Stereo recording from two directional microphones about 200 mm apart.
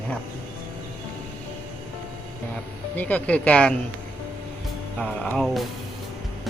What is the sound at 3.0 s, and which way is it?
Speech, 10° left (ahead or behind).